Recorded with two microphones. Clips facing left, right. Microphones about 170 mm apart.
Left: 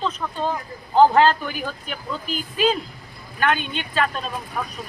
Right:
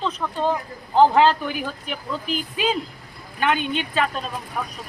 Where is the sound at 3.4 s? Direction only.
15° right (ahead or behind).